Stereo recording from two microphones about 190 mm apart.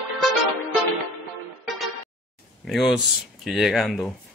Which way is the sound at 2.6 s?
Centre (ahead or behind).